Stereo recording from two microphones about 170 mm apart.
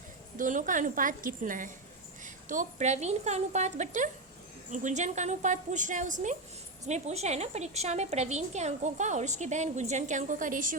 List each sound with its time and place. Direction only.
0.3 s a woman's voice: 50° right (ahead or behind)